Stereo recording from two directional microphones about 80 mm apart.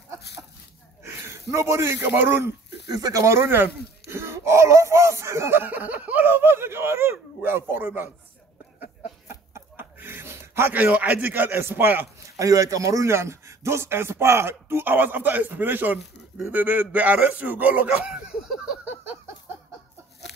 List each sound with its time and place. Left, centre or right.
1.0 s a sound: right
2.0 s a man's voice: right
2.9 s speech: right
9.3 s a sound: right
9.9 s speech: right
12.4 s a man's voice: right; by 18.8 s centre